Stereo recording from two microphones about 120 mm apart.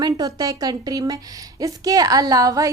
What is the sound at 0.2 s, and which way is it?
A woman's voice, 30° right (ahead or behind).